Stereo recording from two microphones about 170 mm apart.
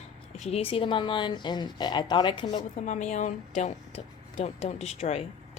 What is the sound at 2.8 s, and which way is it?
A woman's voice, 45° left (ahead or behind).